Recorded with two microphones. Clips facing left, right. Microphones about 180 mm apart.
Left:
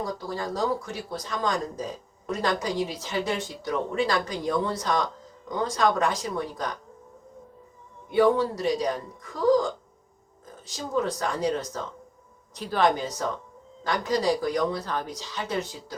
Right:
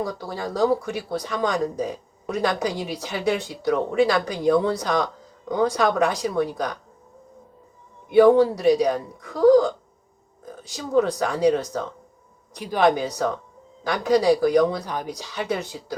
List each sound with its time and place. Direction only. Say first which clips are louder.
0.0 s speech: right 3 dB; 65° right (ahead or behind)
8.1 s speech: right 7 dB; 65° right (ahead or behind)
12.5 s a woman's voice: right 2 dB; 15° right (ahead or behind)
12.8 s speech: right 4 dB; 65° right (ahead or behind)
14.8 s a woman's voice: right 2 dB; 15° right (ahead or behind)
15.1 s speech: right 3 dB; 65° right (ahead or behind)